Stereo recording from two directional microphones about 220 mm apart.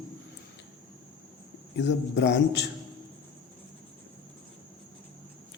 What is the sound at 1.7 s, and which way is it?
Speech, 55° left (ahead or behind).